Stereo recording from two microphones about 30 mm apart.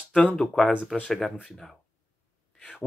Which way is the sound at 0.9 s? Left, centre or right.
Centre.